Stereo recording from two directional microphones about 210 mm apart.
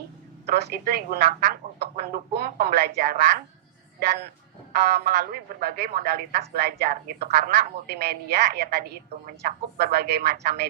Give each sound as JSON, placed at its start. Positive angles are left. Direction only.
{"t": 0.4, "sound": "speech", "side_deg": -50}
{"t": 4.7, "sound": "speech", "side_deg": -45}